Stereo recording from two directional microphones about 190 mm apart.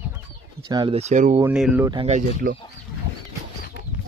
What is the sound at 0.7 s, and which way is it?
Speech, 20° right (ahead or behind).